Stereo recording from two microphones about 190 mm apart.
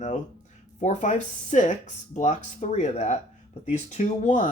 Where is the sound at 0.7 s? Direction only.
40° left (ahead or behind).